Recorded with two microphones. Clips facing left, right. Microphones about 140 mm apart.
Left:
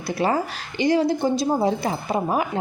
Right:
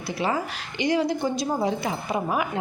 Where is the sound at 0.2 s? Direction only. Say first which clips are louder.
Left 4 dB; 40° left (ahead or behind).